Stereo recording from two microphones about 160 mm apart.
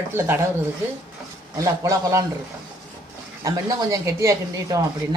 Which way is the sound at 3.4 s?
20° right (ahead or behind).